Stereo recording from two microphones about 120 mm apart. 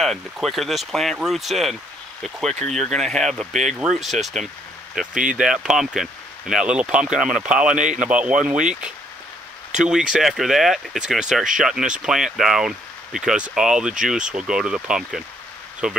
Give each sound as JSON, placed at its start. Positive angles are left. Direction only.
{"t": 0.0, "sound": "speech", "side_deg": 0}
{"t": 7.7, "sound": "speech", "side_deg": -90}
{"t": 8.0, "sound": "speech", "side_deg": -10}
{"t": 9.8, "sound": "speech", "side_deg": -5}